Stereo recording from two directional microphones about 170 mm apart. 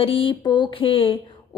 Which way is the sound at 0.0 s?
30° left (ahead or behind).